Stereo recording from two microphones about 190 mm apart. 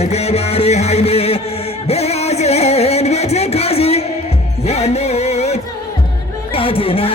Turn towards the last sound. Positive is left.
turn(degrees=30)  # may be behind; listen again after turning